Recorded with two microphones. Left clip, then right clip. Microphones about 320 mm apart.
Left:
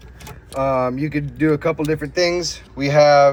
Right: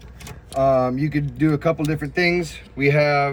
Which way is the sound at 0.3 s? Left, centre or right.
Centre.